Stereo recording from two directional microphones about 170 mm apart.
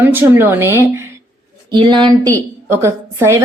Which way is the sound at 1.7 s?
25° right (ahead or behind).